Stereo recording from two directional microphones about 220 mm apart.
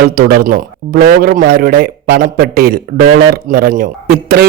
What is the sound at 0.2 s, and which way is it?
Speech, 40° right (ahead or behind).